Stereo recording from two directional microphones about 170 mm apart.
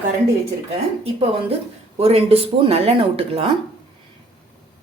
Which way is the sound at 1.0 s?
35° right (ahead or behind).